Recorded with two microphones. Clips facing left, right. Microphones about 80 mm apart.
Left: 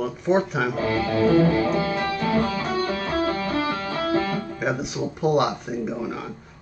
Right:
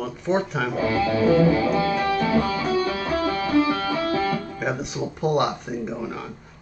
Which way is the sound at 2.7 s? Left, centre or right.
Left.